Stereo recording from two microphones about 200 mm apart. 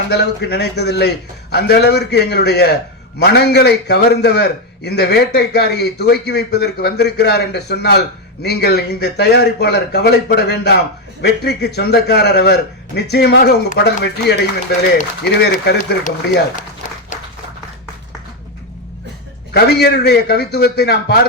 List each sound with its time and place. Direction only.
0.1 s a man's voice: 55° left (ahead or behind)
19.5 s speech: 55° left (ahead or behind)